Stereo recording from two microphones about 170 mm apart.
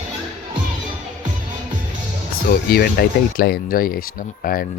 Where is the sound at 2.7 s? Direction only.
65° left (ahead or behind).